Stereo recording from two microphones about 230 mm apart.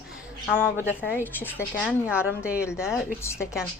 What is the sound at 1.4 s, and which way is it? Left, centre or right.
Speech, centre.